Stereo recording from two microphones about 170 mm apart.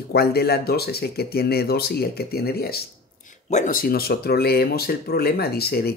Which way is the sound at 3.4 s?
45° left (ahead or behind).